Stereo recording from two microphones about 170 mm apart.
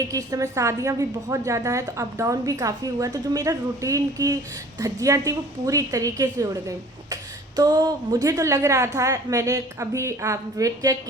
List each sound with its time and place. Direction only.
0.1 s a woman's voice: 20° right (ahead or behind)